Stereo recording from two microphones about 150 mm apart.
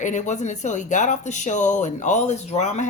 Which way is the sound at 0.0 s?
55° left (ahead or behind).